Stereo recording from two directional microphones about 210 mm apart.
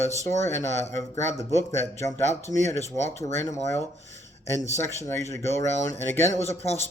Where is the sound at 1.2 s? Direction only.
15° left (ahead or behind).